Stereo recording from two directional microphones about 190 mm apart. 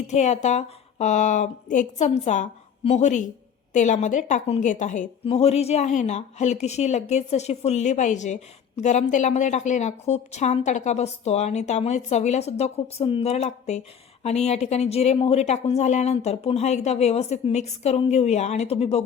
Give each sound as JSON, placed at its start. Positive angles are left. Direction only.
{"t": 0.1, "sound": "a woman's voice", "side_deg": 35}